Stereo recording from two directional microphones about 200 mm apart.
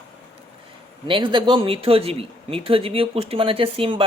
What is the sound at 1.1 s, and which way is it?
Speech, 25° right (ahead or behind).